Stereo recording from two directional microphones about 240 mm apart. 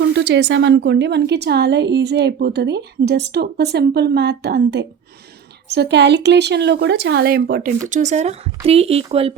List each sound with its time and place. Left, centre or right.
0.0 s a woman's voice: right
7.9 s speech: right